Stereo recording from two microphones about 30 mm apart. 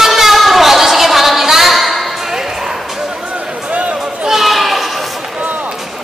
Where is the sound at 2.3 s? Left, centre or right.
Centre.